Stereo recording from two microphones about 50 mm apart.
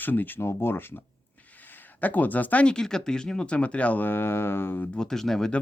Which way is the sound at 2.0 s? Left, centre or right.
Left.